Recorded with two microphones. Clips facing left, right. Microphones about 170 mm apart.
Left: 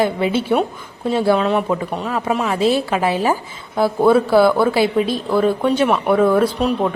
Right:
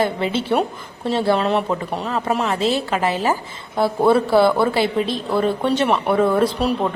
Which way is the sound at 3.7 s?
Centre (ahead or behind).